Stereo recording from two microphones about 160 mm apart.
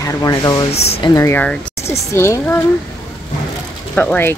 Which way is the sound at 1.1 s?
15° left (ahead or behind).